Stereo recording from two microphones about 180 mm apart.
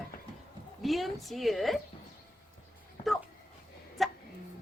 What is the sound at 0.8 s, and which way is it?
A woman's voice, centre (ahead or behind).